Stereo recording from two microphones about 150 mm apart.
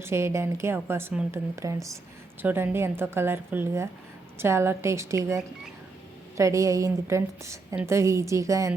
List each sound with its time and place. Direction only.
0.0 s a woman's voice: 20° right (ahead or behind)